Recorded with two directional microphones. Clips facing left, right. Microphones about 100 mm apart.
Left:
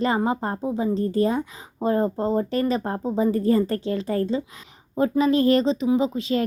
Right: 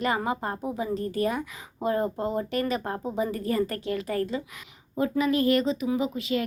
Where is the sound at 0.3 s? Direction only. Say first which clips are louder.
Left 4 dB; 30° left (ahead or behind).